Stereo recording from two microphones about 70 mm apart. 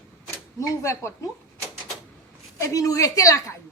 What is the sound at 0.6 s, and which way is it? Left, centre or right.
Speech, left.